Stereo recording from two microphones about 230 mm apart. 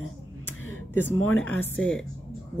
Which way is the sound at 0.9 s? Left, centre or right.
Centre.